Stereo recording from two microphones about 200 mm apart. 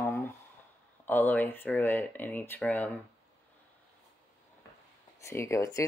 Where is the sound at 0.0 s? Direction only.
15° left (ahead or behind).